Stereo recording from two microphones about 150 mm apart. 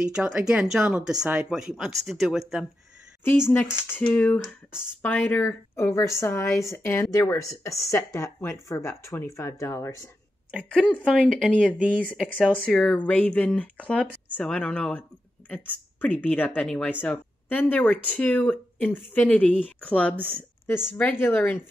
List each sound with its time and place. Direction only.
0.0 s speech: 5° right (ahead or behind)
3.9 s speech: 10° left (ahead or behind)
10.6 s speech: 10° left (ahead or behind)